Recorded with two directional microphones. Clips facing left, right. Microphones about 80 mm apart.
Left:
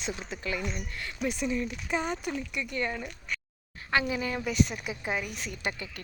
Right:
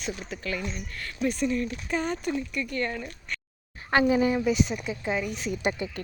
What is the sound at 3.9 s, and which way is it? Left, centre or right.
Speech, right.